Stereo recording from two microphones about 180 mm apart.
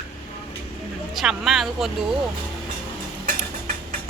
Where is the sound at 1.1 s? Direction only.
Centre (ahead or behind).